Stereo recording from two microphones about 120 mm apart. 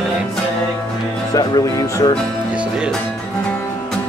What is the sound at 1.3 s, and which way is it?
Speech, 30° left (ahead or behind).